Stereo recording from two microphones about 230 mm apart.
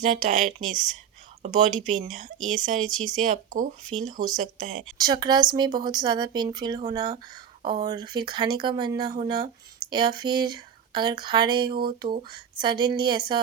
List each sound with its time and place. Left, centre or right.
0.0 s speech: right
4.9 s speech: centre